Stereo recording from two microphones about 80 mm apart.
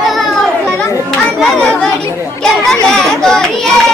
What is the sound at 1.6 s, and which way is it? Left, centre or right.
Chatter, centre.